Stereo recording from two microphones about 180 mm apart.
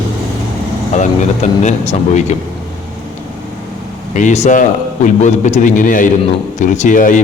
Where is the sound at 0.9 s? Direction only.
40° left (ahead or behind).